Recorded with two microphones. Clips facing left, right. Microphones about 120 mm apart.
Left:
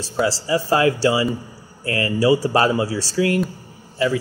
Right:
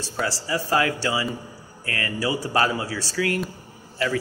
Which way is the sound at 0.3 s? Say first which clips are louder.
Left 2 dB; 25° left (ahead or behind).